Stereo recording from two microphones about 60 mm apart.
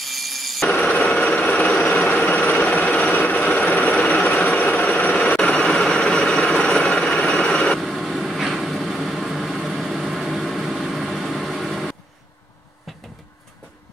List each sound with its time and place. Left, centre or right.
0.0 s a sound: centre
0.7 s vehicle: left
7.8 s vehicle: centre